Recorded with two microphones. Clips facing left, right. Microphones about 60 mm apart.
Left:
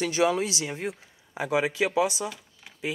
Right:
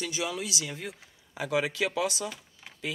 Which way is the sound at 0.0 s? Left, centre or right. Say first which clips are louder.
Left 9 dB; left.